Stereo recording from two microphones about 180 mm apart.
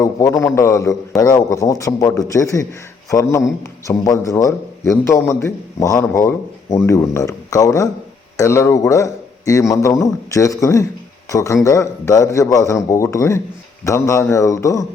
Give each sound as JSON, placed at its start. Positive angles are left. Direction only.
{"t": 0.0, "sound": "a man's voice", "side_deg": 20}